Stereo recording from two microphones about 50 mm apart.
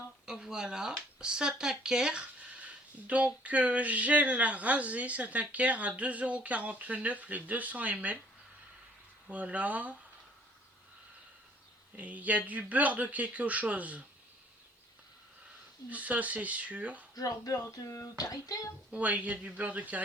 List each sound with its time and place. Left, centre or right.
0.3 s speech: centre
2.6 s speech: right
9.3 s speech: right
11.9 s speech: right
15.9 s speech: right
17.8 s speech: left
18.9 s speech: right